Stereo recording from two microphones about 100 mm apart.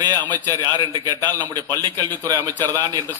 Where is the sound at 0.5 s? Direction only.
35° right (ahead or behind).